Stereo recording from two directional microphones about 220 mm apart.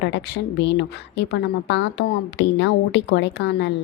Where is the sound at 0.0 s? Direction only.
50° left (ahead or behind).